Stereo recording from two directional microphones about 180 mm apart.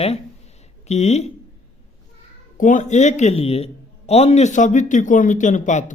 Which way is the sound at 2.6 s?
45° left (ahead or behind).